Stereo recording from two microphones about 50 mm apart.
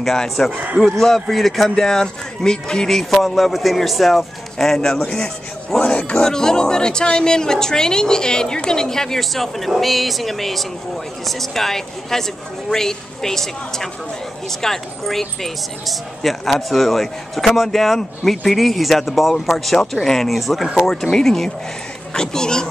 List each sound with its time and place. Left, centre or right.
0.0 s a woman's voice: centre
5.9 s speech: left
6.2 s a woman's voice: centre